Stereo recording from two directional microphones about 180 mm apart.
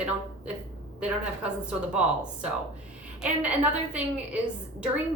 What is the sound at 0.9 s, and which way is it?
A woman's voice, 5° right (ahead or behind).